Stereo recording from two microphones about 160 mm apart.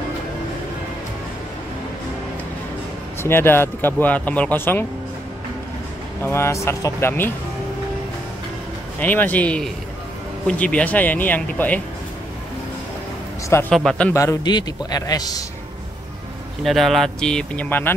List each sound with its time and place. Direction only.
3.2 s speech: 15° left (ahead or behind)
6.2 s speech: 15° left (ahead or behind)
9.0 s speech: 10° left (ahead or behind)
13.7 s speech: 5° left (ahead or behind)
14.1 s a man's voice: 20° left (ahead or behind)
16.6 s speech: centre (ahead or behind)